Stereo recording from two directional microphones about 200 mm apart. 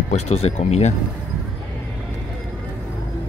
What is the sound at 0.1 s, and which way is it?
Speech, 30° left (ahead or behind).